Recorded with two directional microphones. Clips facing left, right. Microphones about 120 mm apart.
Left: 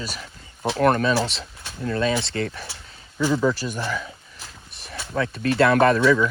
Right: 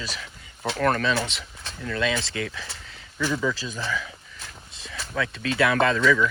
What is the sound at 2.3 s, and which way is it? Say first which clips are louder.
Speech: left 4 dB; 50° left (ahead or behind).